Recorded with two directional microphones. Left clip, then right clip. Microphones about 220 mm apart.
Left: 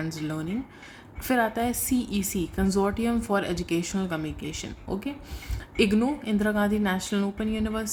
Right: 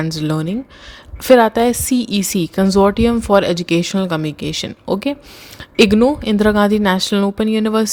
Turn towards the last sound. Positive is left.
turn(degrees=-45)  # may be behind; listen again after turning